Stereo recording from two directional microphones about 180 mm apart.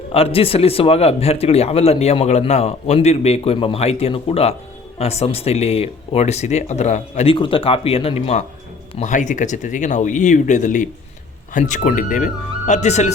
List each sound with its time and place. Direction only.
0.1 s speech: 30° left (ahead or behind)